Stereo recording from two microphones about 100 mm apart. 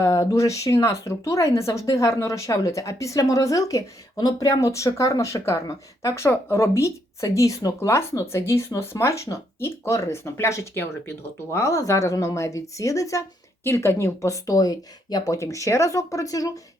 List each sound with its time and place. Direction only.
0.0 s speech: 35° left (ahead or behind)